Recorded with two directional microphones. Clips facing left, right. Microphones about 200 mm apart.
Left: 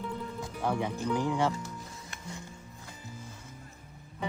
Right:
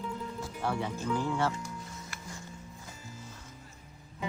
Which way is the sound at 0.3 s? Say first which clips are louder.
Left 3 dB; 15° left (ahead or behind).